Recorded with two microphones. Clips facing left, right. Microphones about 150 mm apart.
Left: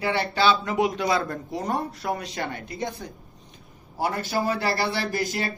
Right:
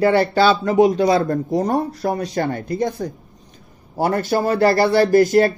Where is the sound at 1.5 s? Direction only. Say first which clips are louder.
Right 7 dB; 45° right (ahead or behind).